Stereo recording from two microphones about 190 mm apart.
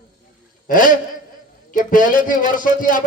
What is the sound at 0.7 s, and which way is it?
A man's voice, 45° left (ahead or behind).